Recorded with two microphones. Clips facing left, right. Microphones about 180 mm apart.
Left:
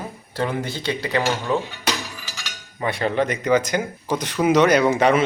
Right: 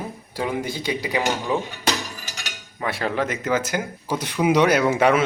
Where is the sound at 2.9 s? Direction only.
5° right (ahead or behind).